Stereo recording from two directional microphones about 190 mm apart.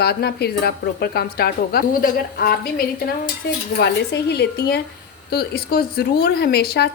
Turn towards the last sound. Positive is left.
turn(degrees=55)  # may be behind; listen again after turning